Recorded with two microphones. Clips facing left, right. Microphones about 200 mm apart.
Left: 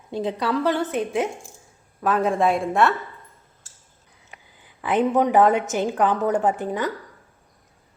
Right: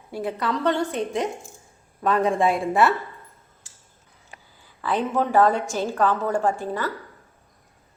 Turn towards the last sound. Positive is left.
turn(degrees=15)  # may be behind; listen again after turning